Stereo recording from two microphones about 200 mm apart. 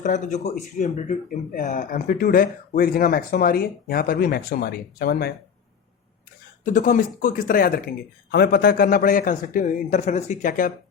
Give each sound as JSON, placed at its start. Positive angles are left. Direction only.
{"t": 0.0, "sound": "speech", "side_deg": 35}
{"t": 6.7, "sound": "speech", "side_deg": 45}